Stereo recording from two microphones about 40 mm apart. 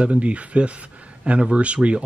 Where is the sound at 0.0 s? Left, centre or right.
Right.